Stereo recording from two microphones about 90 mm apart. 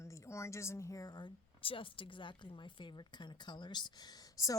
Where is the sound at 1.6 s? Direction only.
75° left (ahead or behind).